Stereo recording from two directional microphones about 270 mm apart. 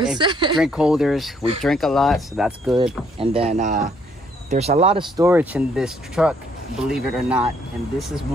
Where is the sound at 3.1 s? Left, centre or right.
Centre.